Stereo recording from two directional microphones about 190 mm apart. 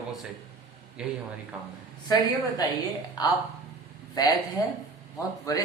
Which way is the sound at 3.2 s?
25° left (ahead or behind).